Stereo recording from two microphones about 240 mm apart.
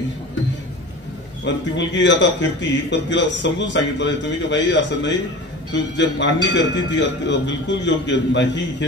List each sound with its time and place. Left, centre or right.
1.4 s a man's voice: left